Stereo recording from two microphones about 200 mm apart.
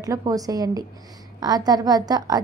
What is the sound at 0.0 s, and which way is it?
A woman's voice, 15° right (ahead or behind).